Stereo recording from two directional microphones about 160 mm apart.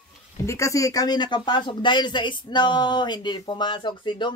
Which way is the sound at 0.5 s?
20° left (ahead or behind).